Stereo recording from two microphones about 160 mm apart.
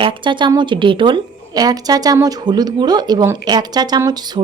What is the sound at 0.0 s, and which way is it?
A woman's voice, 30° right (ahead or behind).